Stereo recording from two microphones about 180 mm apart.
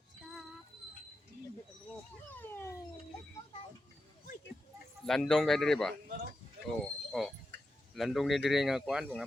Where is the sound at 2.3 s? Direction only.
10° left (ahead or behind).